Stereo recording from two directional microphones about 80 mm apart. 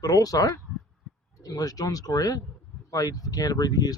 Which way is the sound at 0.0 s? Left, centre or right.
Left.